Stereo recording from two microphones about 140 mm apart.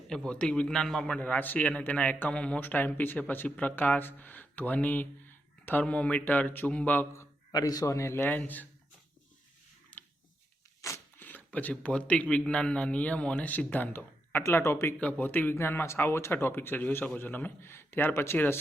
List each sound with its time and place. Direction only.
0.1 s a man's voice: 5° left (ahead or behind)
9.9 s a sound: 10° left (ahead or behind)
10.8 s a man's voice: 20° left (ahead or behind)